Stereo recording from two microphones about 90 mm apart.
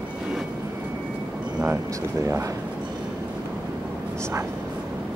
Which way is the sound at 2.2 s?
30° right (ahead or behind).